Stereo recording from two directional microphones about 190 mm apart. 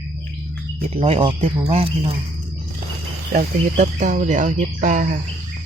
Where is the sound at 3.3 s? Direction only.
45° right (ahead or behind).